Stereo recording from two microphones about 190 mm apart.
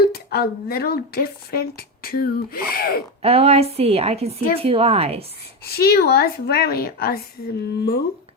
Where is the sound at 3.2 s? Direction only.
30° right (ahead or behind).